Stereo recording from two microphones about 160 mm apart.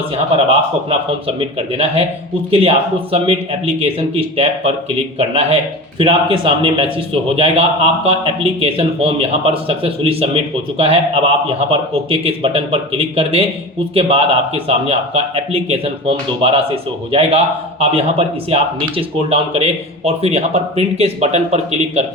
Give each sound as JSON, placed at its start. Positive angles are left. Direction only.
{"t": 1.5, "sound": "a man's voice", "side_deg": -40}